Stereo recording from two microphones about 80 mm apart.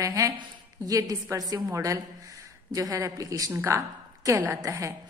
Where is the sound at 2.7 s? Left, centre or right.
Right.